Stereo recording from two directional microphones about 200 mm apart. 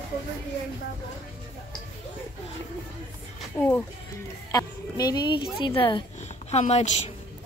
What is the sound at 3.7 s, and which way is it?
A woman's voice, 10° left (ahead or behind).